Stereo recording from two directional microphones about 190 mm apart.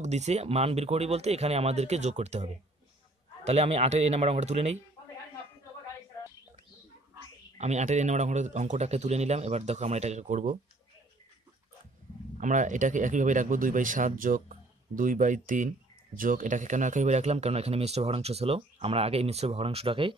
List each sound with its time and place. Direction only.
0.0 s speech: 35° right (ahead or behind)
7.5 s speech: 35° right (ahead or behind)
12.4 s speech: 40° right (ahead or behind)